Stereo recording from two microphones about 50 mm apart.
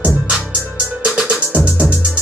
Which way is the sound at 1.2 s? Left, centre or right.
Right.